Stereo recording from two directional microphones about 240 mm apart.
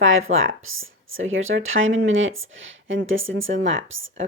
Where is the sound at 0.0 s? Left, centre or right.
Right.